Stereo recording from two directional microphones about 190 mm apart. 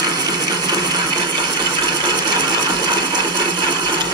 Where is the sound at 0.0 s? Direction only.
20° right (ahead or behind).